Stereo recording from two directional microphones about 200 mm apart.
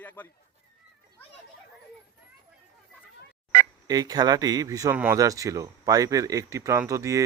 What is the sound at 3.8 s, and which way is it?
Speech, 20° right (ahead or behind).